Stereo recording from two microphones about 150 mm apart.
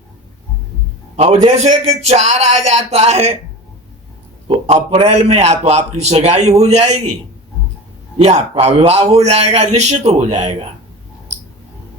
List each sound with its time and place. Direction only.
1.1 s a man's voice: 45° right (ahead or behind)
4.4 s a man's voice: 40° right (ahead or behind)
8.2 s a man's voice: 45° right (ahead or behind)